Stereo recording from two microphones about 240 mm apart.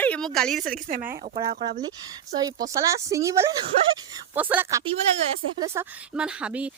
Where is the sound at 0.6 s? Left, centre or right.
Right.